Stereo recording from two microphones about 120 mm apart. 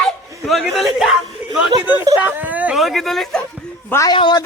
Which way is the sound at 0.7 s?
Centre (ahead or behind).